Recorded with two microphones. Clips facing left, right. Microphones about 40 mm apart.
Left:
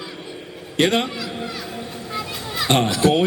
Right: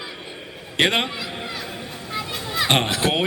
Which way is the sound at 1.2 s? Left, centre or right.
Right.